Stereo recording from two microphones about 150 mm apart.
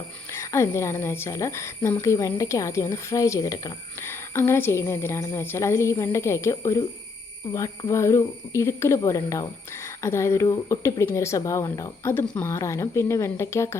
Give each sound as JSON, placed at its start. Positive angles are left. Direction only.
{"t": 0.3, "sound": "a woman's voice", "side_deg": 15}